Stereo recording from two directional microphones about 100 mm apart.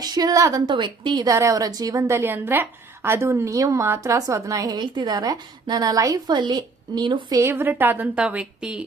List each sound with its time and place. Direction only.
0.0 s a woman's voice: 40° right (ahead or behind)
0.6 s a woman's voice: 50° right (ahead or behind)
1.3 s a woman's voice: 30° right (ahead or behind)
7.3 s a woman's voice: 25° right (ahead or behind); by 8.9 s 10° right (ahead or behind)